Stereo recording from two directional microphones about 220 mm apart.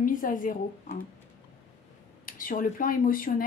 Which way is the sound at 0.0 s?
40° left (ahead or behind).